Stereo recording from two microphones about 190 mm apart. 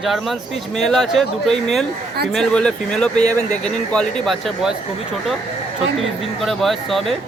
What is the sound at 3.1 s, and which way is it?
Speech, 40° left (ahead or behind).